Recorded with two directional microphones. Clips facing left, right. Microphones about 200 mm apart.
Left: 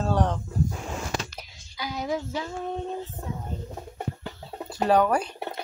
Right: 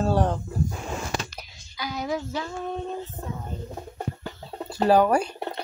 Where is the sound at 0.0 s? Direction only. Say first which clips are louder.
Right 2 dB; 5° right (ahead or behind).